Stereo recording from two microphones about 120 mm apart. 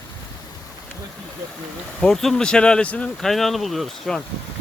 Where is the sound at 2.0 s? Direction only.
5° left (ahead or behind).